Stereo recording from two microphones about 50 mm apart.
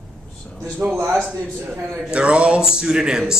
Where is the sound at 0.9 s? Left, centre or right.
Right.